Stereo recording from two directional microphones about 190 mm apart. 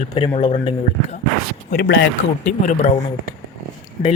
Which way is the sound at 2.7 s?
40° left (ahead or behind).